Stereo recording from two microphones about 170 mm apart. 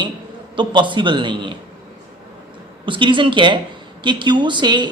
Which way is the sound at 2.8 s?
30° right (ahead or behind).